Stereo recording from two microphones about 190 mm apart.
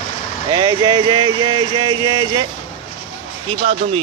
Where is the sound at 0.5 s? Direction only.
25° right (ahead or behind).